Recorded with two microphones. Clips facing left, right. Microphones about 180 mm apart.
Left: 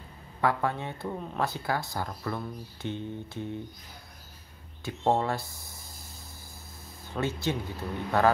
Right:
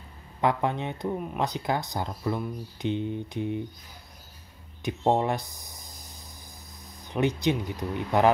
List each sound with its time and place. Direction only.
0.4 s speech: 20° right (ahead or behind)
4.8 s speech: 20° right (ahead or behind)